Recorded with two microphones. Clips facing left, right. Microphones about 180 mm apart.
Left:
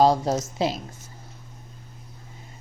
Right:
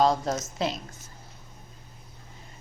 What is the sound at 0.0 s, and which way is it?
Speech, 30° left (ahead or behind).